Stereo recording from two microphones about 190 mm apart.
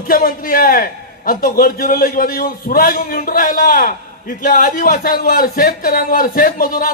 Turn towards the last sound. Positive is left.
turn(degrees=50)  # may be behind; listen again after turning